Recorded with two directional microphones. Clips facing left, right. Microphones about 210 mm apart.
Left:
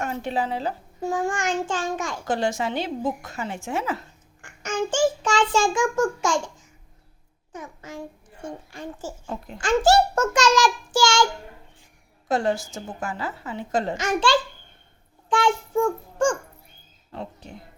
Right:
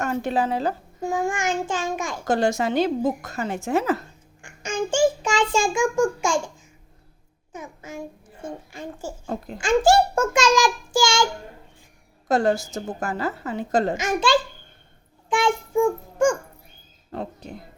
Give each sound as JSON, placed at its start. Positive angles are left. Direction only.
{"t": 0.0, "sound": "a woman's voice", "side_deg": -45}
{"t": 1.0, "sound": "a child's voice", "side_deg": -10}
{"t": 2.2, "sound": "a woman's voice", "side_deg": -40}
{"t": 4.6, "sound": "child singing", "side_deg": -10}
{"t": 5.2, "sound": "a child's voice", "side_deg": -10}
{"t": 7.9, "sound": "a sound", "side_deg": -10}
{"t": 9.2, "sound": "a woman's voice", "side_deg": -40}
{"t": 9.6, "sound": "a child's voice", "side_deg": -10}
{"t": 12.3, "sound": "a woman's voice", "side_deg": -40}
{"t": 14.0, "sound": "a child's voice", "side_deg": -10}
{"t": 17.1, "sound": "speech", "side_deg": -40}